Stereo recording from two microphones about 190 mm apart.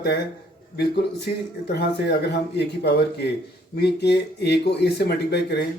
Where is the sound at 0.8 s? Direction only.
60° left (ahead or behind).